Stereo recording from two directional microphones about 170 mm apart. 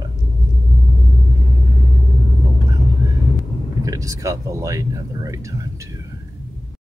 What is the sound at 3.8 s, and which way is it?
Speech, 20° right (ahead or behind).